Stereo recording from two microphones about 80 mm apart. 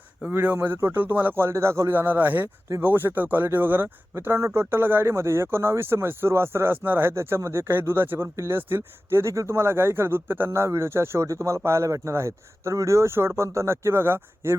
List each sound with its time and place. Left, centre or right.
0.3 s speech: right